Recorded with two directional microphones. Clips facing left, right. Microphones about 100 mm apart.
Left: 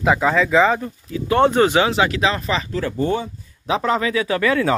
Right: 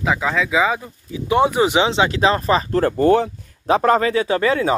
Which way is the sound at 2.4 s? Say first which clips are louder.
Right 6 dB; 45° right (ahead or behind).